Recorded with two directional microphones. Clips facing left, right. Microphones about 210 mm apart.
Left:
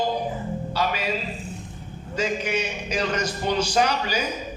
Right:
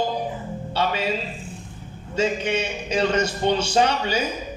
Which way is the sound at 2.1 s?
25° right (ahead or behind).